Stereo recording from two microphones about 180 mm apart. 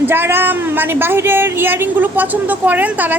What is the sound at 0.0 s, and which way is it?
A woman's voice, 10° right (ahead or behind).